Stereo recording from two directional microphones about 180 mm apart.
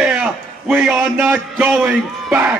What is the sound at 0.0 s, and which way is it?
A man's voice, 5° right (ahead or behind).